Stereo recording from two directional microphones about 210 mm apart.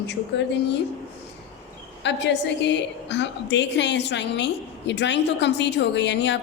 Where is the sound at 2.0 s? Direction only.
55° left (ahead or behind).